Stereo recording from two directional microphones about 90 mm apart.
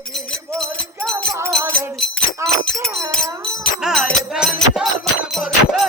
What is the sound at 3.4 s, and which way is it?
Music, 5° left (ahead or behind).